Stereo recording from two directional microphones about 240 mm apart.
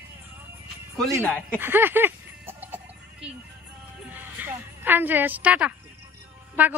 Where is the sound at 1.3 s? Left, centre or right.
Centre.